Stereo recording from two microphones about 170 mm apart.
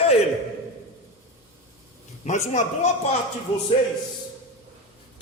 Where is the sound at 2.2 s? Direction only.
45° left (ahead or behind).